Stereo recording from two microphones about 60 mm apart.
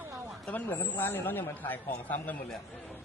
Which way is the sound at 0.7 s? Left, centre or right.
Left.